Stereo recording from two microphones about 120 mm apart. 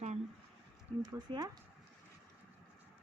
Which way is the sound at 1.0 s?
35° right (ahead or behind).